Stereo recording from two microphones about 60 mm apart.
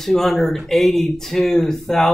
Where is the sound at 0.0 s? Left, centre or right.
Centre.